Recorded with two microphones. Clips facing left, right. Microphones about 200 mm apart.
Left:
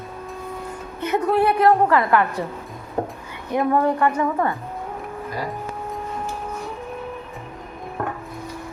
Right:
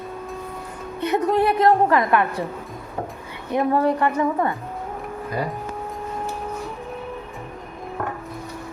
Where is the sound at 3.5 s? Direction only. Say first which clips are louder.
Even; 20° right (ahead or behind).